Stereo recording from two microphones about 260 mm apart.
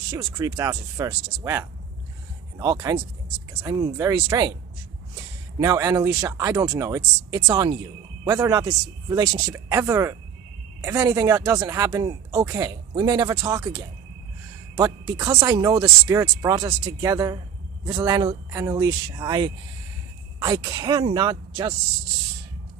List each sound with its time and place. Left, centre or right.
0.1 s speech: centre